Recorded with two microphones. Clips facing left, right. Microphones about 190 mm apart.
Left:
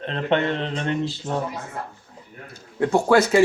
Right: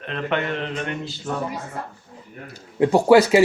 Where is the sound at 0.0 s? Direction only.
30° left (ahead or behind).